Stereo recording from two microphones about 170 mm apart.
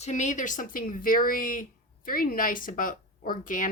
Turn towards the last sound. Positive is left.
turn(degrees=50)  # may be behind; listen again after turning